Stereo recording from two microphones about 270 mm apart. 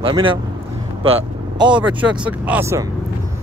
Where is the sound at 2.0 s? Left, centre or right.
Centre.